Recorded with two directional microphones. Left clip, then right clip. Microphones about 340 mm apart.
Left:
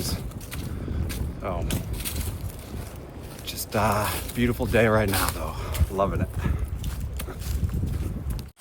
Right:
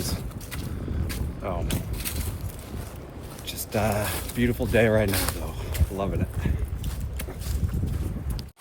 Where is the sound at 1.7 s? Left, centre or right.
Centre.